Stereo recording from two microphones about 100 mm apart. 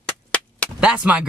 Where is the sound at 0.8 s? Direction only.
10° right (ahead or behind).